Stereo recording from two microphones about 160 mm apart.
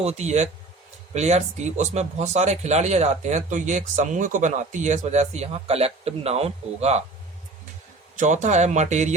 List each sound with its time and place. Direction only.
0.0 s speech: 45° right (ahead or behind)
8.2 s speech: 50° right (ahead or behind)